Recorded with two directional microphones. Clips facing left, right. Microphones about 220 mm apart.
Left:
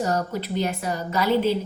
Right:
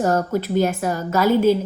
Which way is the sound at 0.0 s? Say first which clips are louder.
Right 5 dB; 50° right (ahead or behind).